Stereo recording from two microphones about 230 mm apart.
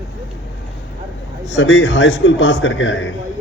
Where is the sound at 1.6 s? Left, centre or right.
Left.